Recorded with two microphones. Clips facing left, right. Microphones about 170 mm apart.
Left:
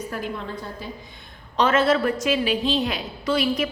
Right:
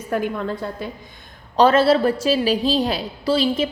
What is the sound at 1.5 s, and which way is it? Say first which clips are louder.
A woman's voice: right 5 dB; 35° right (ahead or behind).